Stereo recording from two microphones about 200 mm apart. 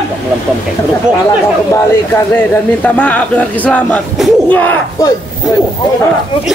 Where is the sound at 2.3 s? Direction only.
10° left (ahead or behind).